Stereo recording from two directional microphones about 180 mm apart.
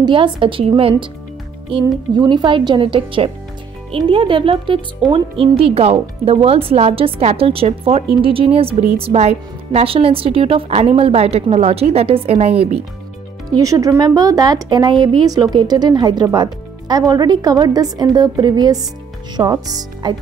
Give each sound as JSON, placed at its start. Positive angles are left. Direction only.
{"t": 0.0, "sound": "a woman's voice", "side_deg": -25}
{"t": 13.5, "sound": "speech", "side_deg": -20}